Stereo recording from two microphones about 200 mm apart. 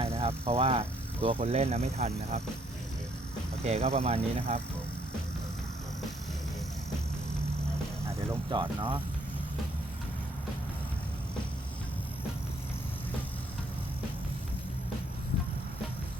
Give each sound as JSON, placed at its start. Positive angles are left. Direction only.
{"t": 0.0, "sound": "speech", "side_deg": -30}
{"t": 3.6, "sound": "speech", "side_deg": -30}
{"t": 8.4, "sound": "speech", "side_deg": -25}